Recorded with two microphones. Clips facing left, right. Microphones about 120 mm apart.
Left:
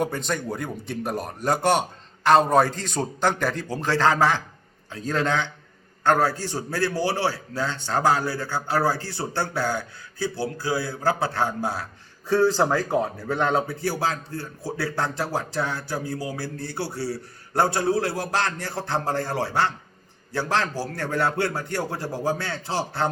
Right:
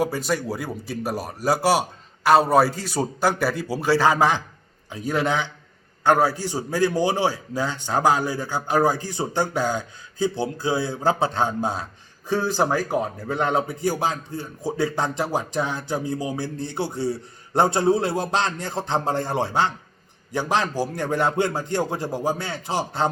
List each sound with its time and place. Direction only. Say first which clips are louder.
0.0 s speech: right 3 dB; 5° right (ahead or behind)